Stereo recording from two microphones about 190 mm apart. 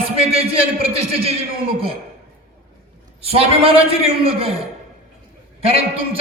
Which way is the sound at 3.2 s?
30° right (ahead or behind).